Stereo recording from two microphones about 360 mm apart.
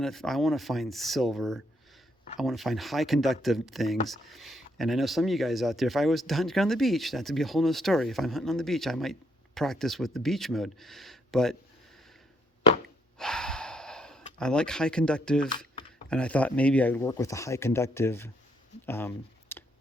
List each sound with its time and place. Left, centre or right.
0.0 s speech: centre
13.1 s gasp: centre
16.0 s speech: centre
18.9 s clicking: centre